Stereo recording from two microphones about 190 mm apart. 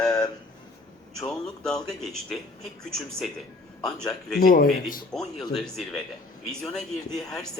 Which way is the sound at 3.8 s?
5° left (ahead or behind).